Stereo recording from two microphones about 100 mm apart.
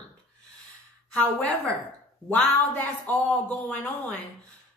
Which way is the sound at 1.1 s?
15° left (ahead or behind).